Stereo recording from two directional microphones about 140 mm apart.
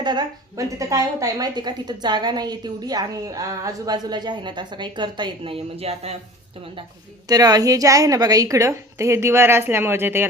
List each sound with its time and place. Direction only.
0.0 s a woman's voice: 30° right (ahead or behind); by 6.1 s 45° right (ahead or behind)
7.3 s a woman's voice: 25° right (ahead or behind)